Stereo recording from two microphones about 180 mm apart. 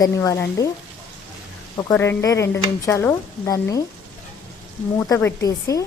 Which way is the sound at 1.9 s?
15° left (ahead or behind).